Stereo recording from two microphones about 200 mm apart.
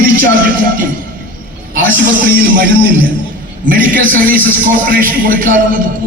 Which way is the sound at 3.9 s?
45° right (ahead or behind).